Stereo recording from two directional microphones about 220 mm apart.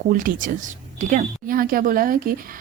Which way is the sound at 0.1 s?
35° right (ahead or behind).